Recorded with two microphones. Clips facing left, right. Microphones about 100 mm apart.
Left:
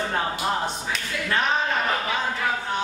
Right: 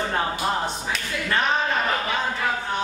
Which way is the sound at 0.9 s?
Centre (ahead or behind).